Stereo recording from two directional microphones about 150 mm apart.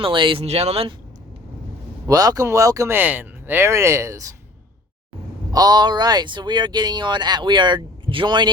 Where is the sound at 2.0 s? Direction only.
25° right (ahead or behind).